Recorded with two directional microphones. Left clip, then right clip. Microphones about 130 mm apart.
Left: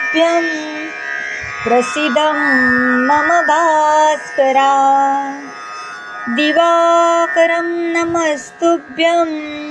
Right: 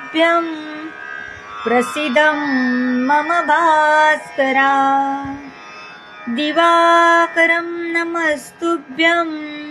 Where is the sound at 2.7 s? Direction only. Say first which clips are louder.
Left 6 dB; 50° left (ahead or behind).